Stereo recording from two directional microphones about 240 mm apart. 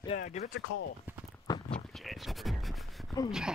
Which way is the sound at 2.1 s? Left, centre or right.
Centre.